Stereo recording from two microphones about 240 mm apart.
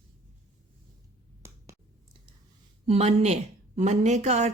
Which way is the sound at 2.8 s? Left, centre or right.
Right.